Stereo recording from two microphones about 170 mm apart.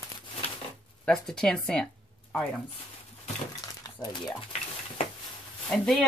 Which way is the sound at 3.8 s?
25° left (ahead or behind).